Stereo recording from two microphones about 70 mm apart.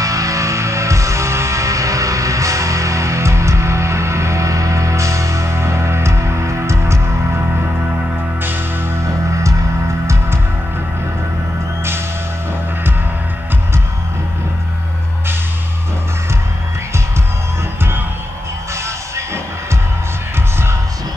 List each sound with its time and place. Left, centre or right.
0.0 s music: right
9.0 s music: right
19.1 s music: right